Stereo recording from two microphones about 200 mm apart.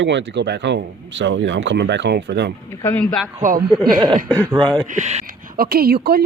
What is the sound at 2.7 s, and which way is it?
Speech, 10° left (ahead or behind).